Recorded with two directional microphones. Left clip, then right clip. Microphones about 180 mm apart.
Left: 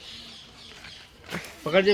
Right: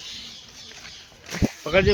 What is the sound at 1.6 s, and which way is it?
Speech, 15° right (ahead or behind).